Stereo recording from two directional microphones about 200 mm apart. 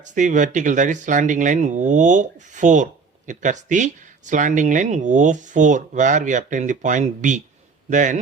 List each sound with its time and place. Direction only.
0.0 s speech: 40° right (ahead or behind)